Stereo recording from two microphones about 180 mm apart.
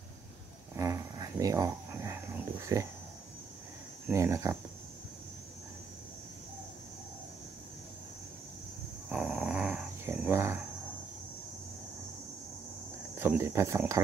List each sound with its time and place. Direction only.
0.7 s dog: 15° right (ahead or behind)
2.6 s speech: 15° right (ahead or behind)
4.1 s speech: 15° right (ahead or behind)
9.1 s dog: 5° right (ahead or behind)
13.2 s speech: 15° right (ahead or behind)